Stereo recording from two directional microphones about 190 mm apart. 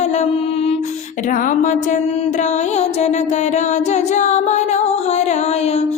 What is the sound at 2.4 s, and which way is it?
Music, 35° left (ahead or behind).